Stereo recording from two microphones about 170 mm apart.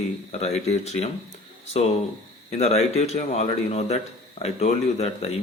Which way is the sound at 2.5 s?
40° left (ahead or behind).